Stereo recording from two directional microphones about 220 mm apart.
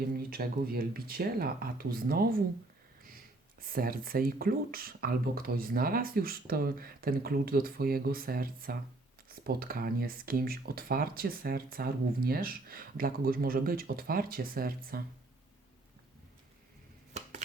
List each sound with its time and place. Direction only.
0.3 s speech: 40° right (ahead or behind)
3.6 s speech: 40° right (ahead or behind)